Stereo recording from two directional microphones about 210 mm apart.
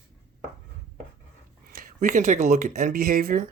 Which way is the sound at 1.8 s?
40° right (ahead or behind).